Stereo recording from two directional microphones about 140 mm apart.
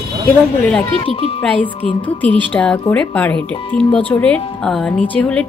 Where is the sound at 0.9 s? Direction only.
45° left (ahead or behind).